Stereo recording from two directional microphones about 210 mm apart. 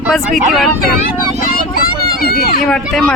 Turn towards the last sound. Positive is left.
turn(degrees=5)  # may be behind; listen again after turning